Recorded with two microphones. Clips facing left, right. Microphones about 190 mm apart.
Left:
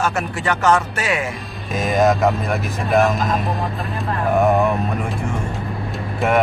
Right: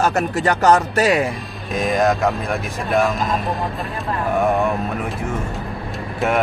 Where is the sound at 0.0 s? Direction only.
40° right (ahead or behind).